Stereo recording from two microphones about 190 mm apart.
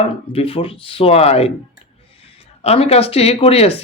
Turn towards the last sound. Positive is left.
turn(degrees=30)  # may be behind; listen again after turning